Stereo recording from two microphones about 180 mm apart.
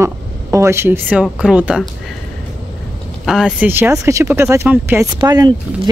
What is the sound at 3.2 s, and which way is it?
Speech, 5° right (ahead or behind).